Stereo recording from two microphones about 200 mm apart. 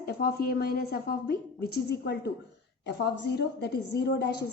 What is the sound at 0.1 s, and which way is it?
A woman's voice, 50° left (ahead or behind).